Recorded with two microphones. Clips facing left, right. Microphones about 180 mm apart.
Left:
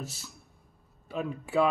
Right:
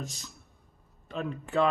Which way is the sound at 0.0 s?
5° left (ahead or behind).